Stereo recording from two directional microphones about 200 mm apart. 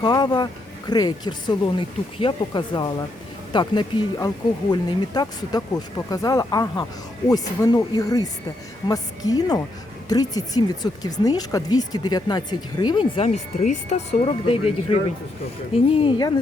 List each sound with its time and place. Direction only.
0.0 s speech: 20° left (ahead or behind)